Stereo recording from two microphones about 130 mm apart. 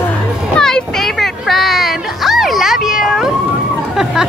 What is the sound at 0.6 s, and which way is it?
Children playing, 5° left (ahead or behind).